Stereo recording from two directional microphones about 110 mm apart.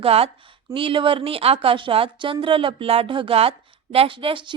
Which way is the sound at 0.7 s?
55° right (ahead or behind).